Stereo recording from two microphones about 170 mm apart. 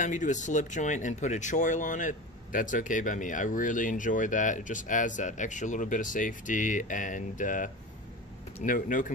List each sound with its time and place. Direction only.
0.0 s speech: 45° left (ahead or behind)